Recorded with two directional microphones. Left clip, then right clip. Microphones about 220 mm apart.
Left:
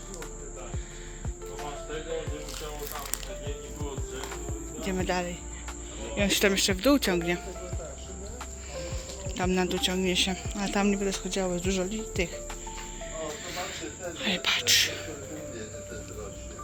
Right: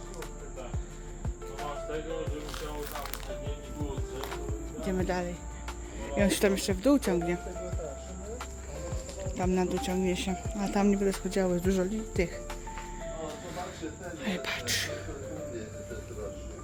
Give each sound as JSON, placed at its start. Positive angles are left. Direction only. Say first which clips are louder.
{"t": 4.8, "sound": "speech", "louder": "left 2 dB", "side_deg": -5}
{"t": 6.1, "sound": "speech", "louder": "left 2 dB", "side_deg": -15}
{"t": 6.5, "sound": "speech", "louder": "left 3 dB", "side_deg": 0}
{"t": 9.3, "sound": "speech", "louder": "left 2 dB", "side_deg": -5}
{"t": 14.2, "sound": "a sound", "louder": "left 7 dB", "side_deg": -10}